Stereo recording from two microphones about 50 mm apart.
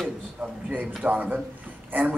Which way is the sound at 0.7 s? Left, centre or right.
Right.